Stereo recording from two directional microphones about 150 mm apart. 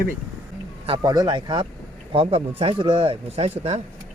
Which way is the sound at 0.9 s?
30° right (ahead or behind).